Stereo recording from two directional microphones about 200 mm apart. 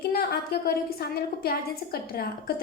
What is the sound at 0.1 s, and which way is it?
A woman's voice, 50° left (ahead or behind).